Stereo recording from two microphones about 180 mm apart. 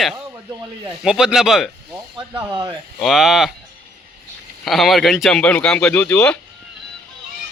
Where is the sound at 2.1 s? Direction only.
25° right (ahead or behind).